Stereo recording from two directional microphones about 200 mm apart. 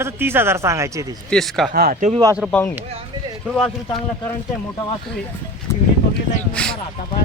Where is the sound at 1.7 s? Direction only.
45° right (ahead or behind).